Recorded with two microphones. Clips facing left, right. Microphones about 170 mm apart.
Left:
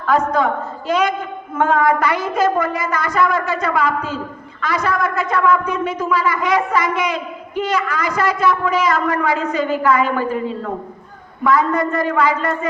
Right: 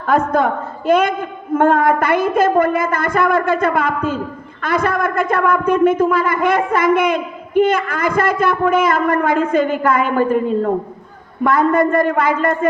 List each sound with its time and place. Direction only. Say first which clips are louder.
0.0 s a woman's voice: right 1 dB; 50° right (ahead or behind)